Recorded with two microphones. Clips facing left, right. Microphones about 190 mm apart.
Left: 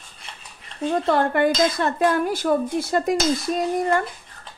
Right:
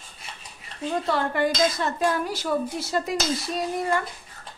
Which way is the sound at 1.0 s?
55° left (ahead or behind).